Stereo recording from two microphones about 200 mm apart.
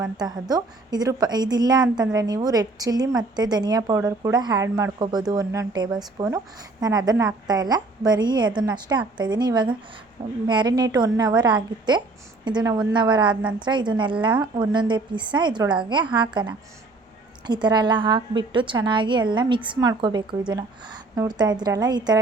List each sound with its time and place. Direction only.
0.0 s a woman's voice: 20° right (ahead or behind)